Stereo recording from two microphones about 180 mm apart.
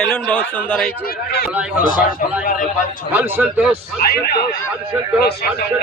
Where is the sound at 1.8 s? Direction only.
50° left (ahead or behind).